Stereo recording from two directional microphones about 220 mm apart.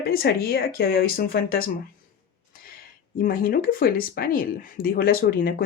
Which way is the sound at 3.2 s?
40° left (ahead or behind).